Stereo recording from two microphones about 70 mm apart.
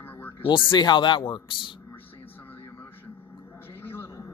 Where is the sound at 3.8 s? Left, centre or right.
Left.